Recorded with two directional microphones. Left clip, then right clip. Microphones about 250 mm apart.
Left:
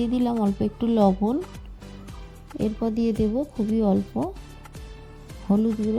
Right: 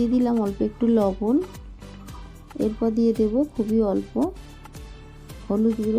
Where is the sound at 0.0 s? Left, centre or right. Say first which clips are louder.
Right 2 dB; left.